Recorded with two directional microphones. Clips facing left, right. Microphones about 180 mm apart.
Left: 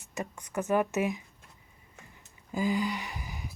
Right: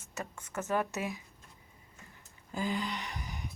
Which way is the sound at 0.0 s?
15° left (ahead or behind).